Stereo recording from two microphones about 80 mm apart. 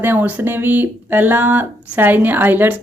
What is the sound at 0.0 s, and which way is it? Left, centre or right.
Speech, right.